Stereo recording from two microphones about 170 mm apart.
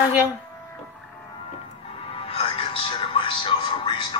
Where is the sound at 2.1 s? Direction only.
35° left (ahead or behind).